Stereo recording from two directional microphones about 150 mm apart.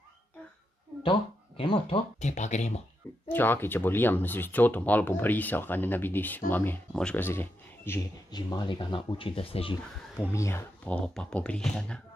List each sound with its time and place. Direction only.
1.6 s speech: 35° left (ahead or behind)
2.2 s speech: 50° left (ahead or behind)
3.3 s speech: 15° left (ahead or behind)
8.3 s speech: 25° left (ahead or behind)
10.1 s speech: 20° left (ahead or behind)
10.9 s speech: 5° left (ahead or behind)